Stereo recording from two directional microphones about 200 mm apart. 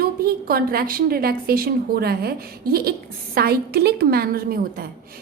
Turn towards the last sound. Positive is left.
turn(degrees=-45)  # may be behind; listen again after turning